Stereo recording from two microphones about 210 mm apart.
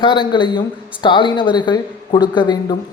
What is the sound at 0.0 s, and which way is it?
Speech, 20° left (ahead or behind).